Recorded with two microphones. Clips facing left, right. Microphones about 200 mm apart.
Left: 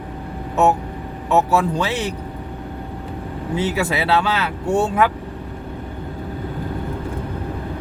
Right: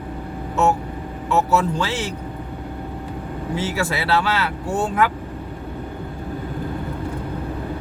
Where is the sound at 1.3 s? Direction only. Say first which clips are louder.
Left 2 dB; 15° left (ahead or behind).